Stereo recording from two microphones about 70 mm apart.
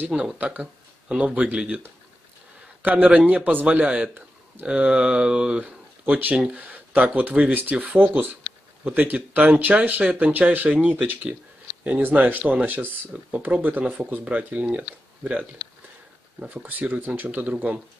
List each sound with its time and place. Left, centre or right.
0.0 s speech: centre
2.8 s speech: right
16.6 s speech: right